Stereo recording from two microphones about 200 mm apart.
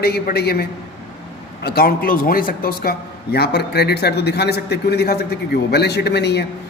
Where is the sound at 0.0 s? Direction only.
50° left (ahead or behind).